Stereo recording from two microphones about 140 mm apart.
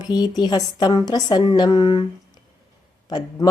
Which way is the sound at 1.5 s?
30° left (ahead or behind).